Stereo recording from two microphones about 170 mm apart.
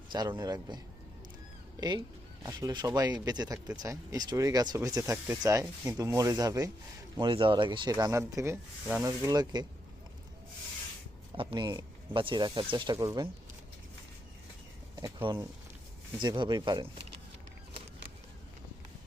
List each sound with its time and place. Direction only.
0.1 s speech: 25° right (ahead or behind)
2.4 s speech: 20° right (ahead or behind)
11.3 s speech: 25° right (ahead or behind)
14.9 s speech: 20° right (ahead or behind)